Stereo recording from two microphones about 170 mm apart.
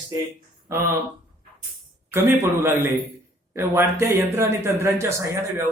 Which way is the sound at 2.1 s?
15° right (ahead or behind).